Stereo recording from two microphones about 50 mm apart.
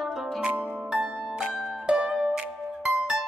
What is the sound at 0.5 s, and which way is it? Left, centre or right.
Music, right.